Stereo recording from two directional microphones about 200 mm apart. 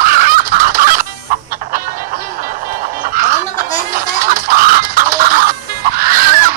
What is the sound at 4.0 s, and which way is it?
Music, 45° right (ahead or behind).